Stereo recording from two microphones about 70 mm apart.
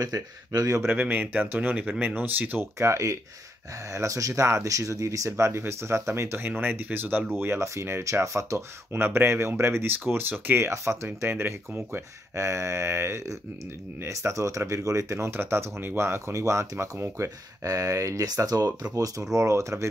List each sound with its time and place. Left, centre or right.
0.0 s speech: right
0.8 s speech: right
2.8 s speech: right
5.4 s speech: right
10.6 s speech: right
12.4 s speech: right
19.3 s speech: right